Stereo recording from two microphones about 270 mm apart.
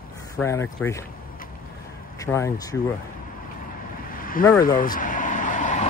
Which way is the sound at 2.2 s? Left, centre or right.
Centre.